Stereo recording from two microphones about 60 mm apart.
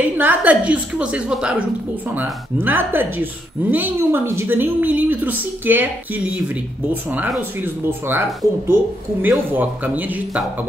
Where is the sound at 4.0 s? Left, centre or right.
Right.